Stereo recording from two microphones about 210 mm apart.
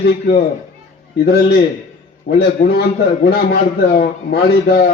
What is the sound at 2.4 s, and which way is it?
A man's voice, 45° left (ahead or behind).